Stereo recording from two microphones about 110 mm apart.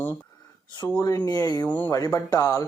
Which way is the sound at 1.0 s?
35° left (ahead or behind).